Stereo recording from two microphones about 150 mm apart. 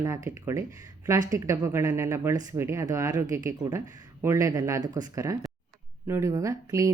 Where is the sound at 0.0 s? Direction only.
20° right (ahead or behind).